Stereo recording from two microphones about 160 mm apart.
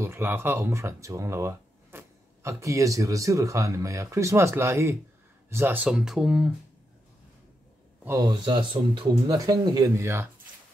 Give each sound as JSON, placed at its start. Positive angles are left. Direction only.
{"t": 0.0, "sound": "speech", "side_deg": -15}
{"t": 8.0, "sound": "speech", "side_deg": -20}
{"t": 8.3, "sound": "speech", "side_deg": -30}